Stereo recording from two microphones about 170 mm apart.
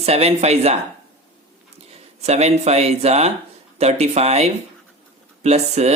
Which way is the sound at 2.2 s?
40° right (ahead or behind).